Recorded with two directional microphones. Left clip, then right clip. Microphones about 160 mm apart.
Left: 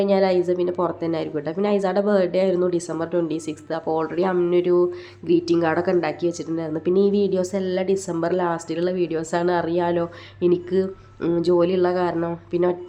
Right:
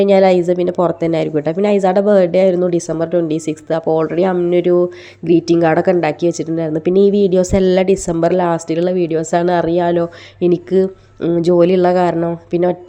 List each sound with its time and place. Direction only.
0.0 s a woman's voice: 40° right (ahead or behind)